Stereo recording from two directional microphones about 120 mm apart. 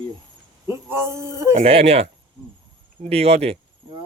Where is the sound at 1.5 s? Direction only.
60° right (ahead or behind).